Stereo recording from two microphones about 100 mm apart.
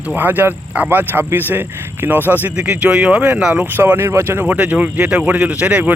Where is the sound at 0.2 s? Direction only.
20° right (ahead or behind).